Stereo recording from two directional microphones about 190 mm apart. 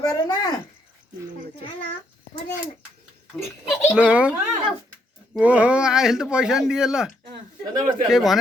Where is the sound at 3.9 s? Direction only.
5° right (ahead or behind).